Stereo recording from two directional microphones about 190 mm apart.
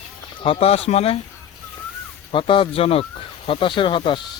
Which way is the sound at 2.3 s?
25° left (ahead or behind).